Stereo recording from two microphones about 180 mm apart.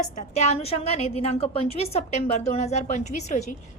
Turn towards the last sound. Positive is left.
turn(degrees=40)  # may be behind; listen again after turning